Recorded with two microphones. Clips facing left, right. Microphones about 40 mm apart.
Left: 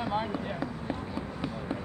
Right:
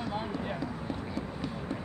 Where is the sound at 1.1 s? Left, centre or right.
Left.